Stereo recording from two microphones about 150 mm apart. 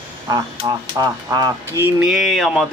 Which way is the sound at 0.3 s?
25° right (ahead or behind).